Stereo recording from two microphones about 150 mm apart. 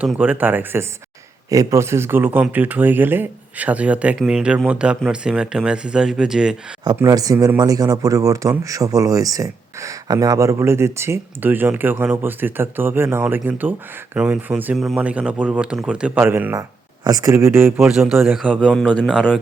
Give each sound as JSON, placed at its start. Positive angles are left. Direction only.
{"t": 0.0, "sound": "speech", "side_deg": -10}
{"t": 6.8, "sound": "speech", "side_deg": -25}
{"t": 16.6, "sound": "speech", "side_deg": -25}
{"t": 17.7, "sound": "speech", "side_deg": -5}
{"t": 18.7, "sound": "speech", "side_deg": 5}